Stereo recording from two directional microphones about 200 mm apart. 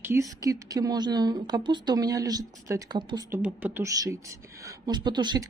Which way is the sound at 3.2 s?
10° right (ahead or behind).